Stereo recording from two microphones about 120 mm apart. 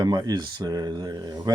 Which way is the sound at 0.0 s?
35° right (ahead or behind).